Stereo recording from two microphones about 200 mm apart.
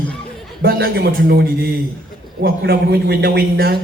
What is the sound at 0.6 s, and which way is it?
A man's voice, 50° right (ahead or behind).